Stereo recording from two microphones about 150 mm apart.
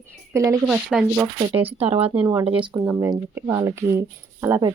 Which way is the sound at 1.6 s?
40° right (ahead or behind).